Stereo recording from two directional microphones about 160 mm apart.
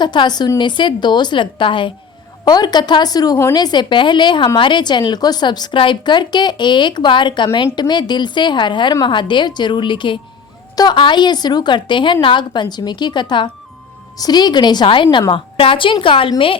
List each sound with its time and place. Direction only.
0.0 s a woman's voice: 30° left (ahead or behind)